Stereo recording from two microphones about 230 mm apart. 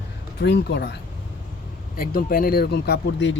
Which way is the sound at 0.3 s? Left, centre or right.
Left.